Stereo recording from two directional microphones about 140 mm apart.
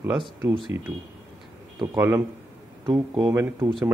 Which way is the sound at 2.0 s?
15° right (ahead or behind).